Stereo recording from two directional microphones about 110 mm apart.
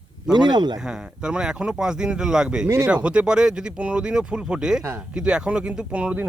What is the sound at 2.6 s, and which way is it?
Speech, 25° right (ahead or behind).